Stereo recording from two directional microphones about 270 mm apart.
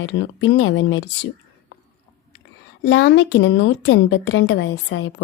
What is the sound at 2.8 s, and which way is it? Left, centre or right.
A woman's voice, left.